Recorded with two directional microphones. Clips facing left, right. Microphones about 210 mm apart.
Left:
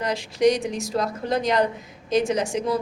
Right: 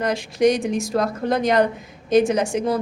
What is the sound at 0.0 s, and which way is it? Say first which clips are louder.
A woman's voice: right 2 dB; 50° right (ahead or behind).